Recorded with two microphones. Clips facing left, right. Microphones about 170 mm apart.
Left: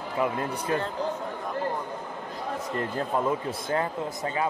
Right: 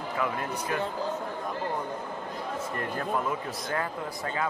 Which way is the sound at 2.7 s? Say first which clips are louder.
Left 3 dB; 25° left (ahead or behind).